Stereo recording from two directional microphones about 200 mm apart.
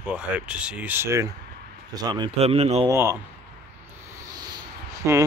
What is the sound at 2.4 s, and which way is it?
Speech, 30° right (ahead or behind).